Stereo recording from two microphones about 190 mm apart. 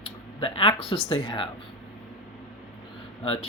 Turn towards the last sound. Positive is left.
turn(degrees=25)  # may be behind; listen again after turning